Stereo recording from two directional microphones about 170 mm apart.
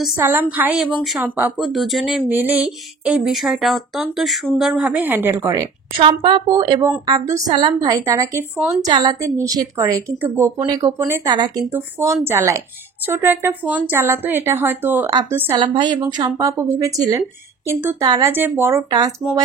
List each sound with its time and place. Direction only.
0.2 s speech: 10° right (ahead or behind)
5.9 s a woman's voice: 30° right (ahead or behind)
11.7 s speech: 15° right (ahead or behind)
15.5 s a woman's voice: 25° right (ahead or behind)